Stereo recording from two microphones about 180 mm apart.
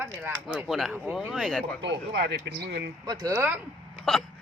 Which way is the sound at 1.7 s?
75° right (ahead or behind).